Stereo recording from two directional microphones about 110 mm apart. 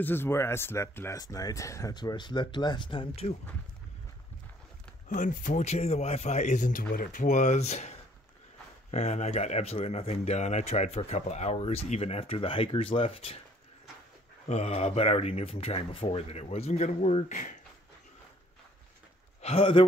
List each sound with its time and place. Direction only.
0.0 s speech: 20° left (ahead or behind)
2.0 s speech: 40° left (ahead or behind); by 3.3 s 60° left (ahead or behind)
5.5 s a man's voice: 90° left
8.9 s speech: 90° left; by 13.4 s 60° left (ahead or behind)
14.5 s speech: 80° left
19.4 s speech: 60° left (ahead or behind)